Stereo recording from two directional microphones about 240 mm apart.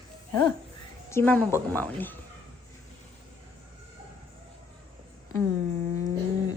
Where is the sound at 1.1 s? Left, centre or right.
Centre.